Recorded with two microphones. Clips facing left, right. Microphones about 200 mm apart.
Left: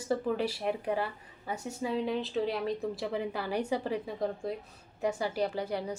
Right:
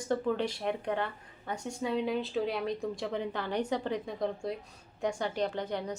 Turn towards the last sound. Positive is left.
turn(degrees=10)  # may be behind; listen again after turning